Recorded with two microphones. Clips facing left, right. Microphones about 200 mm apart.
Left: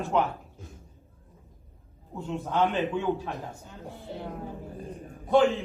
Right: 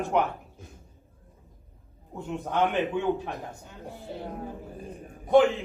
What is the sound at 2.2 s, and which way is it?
A woman's voice, 15° right (ahead or behind).